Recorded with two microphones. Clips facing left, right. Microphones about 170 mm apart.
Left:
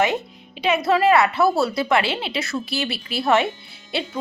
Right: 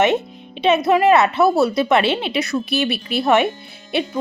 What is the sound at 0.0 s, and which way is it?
A woman's voice, 25° right (ahead or behind).